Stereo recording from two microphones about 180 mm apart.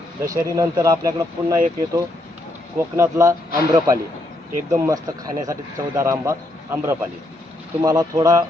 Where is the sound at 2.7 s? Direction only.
15° right (ahead or behind).